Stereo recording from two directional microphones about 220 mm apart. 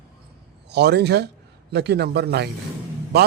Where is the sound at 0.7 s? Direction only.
50° right (ahead or behind).